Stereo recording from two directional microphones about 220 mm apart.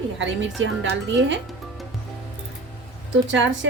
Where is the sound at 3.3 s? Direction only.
55° right (ahead or behind).